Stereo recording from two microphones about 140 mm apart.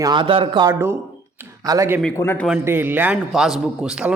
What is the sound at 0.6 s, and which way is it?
A man's voice, 20° right (ahead or behind).